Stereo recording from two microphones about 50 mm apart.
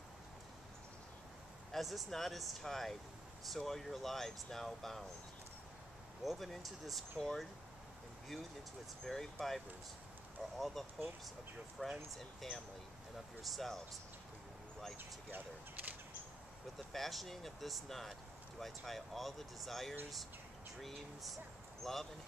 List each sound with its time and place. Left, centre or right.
1.7 s speech: centre
6.2 s speech: centre
9.0 s speech: centre
10.6 s speech: centre
15.0 s speech: right
16.7 s speech: centre